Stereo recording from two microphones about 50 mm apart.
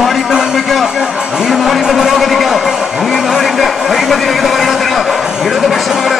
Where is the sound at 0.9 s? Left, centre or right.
Centre.